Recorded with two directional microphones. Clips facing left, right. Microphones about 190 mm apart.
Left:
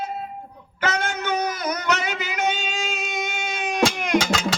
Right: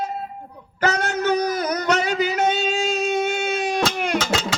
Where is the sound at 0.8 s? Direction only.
40° right (ahead or behind).